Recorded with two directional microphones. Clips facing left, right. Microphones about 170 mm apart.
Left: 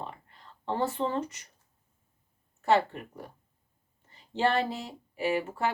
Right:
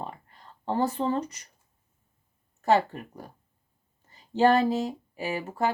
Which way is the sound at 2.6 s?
40° right (ahead or behind).